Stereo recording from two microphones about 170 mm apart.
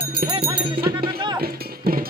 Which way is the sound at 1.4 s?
60° right (ahead or behind).